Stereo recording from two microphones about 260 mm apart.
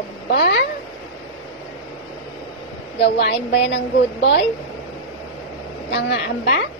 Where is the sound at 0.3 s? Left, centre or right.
Left.